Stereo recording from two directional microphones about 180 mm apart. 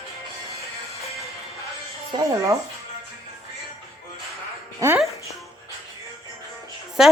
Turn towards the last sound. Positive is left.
turn(degrees=-5)  # may be behind; listen again after turning